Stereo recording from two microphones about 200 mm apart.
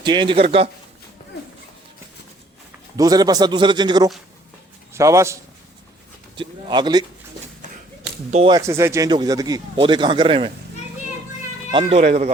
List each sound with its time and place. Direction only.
0.0 s speech: 25° right (ahead or behind)
2.9 s speech: 20° right (ahead or behind)
8.3 s speech: 30° right (ahead or behind)
8.5 s speech: 15° right (ahead or behind)
11.7 s speech: 30° right (ahead or behind)